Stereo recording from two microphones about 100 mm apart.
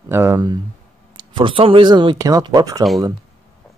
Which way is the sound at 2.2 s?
40° right (ahead or behind).